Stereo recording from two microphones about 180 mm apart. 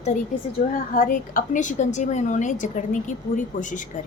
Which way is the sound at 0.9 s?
50° left (ahead or behind).